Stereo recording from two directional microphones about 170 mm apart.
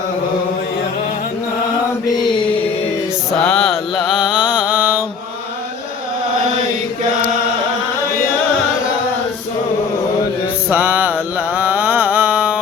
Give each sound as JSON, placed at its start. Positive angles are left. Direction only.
{"t": 2.1, "sound": "mantra", "side_deg": 30}
{"t": 3.4, "sound": "mantra", "side_deg": 5}
{"t": 10.7, "sound": "mantra", "side_deg": -10}